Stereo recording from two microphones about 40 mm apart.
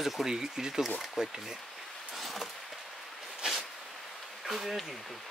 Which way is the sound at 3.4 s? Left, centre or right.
Right.